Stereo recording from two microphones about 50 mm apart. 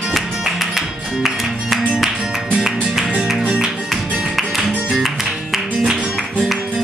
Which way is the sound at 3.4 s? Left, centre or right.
Centre.